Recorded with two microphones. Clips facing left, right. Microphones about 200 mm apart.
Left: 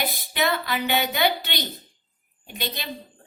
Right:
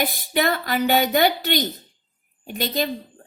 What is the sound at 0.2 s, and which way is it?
Speech, 45° right (ahead or behind).